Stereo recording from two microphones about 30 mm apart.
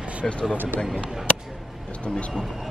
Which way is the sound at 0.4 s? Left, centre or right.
Left.